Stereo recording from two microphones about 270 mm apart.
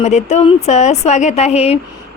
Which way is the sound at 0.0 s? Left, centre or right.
Left.